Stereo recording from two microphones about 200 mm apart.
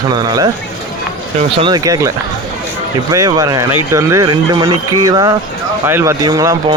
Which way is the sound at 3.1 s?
15° right (ahead or behind).